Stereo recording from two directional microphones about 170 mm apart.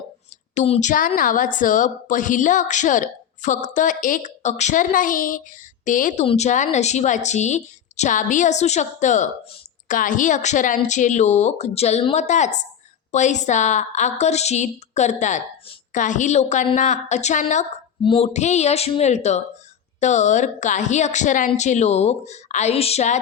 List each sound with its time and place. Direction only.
0.5 s a woman's voice: 45° left (ahead or behind)
18.0 s a woman's voice: 35° left (ahead or behind)